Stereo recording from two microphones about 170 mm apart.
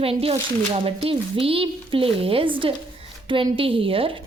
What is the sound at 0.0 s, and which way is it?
A woman's voice, 35° right (ahead or behind).